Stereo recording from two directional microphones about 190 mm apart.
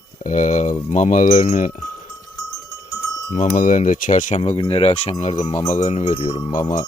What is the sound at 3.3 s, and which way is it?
Speech, 45° left (ahead or behind).